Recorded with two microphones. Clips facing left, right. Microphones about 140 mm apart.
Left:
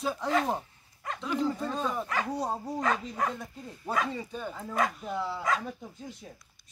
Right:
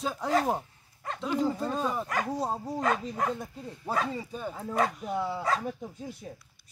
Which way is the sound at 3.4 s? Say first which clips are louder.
Right 1 dB; 35° right (ahead or behind).